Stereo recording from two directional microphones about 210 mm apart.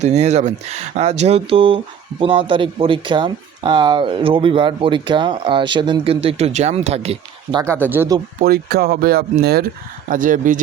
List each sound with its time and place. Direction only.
0.0 s speech: 30° right (ahead or behind)
7.6 s speech: 10° right (ahead or behind)
8.4 s speech: 45° right (ahead or behind)